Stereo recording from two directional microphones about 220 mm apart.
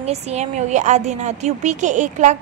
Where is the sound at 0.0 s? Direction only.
30° right (ahead or behind).